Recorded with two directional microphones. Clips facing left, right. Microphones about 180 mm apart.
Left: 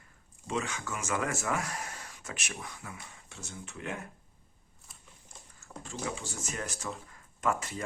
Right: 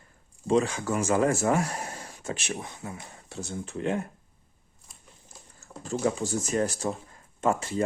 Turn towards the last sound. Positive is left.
turn(degrees=-30)  # may be behind; listen again after turning